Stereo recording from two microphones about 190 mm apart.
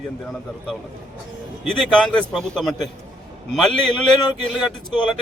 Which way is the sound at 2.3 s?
Centre (ahead or behind).